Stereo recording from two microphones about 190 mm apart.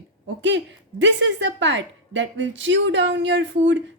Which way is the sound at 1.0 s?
70° right (ahead or behind).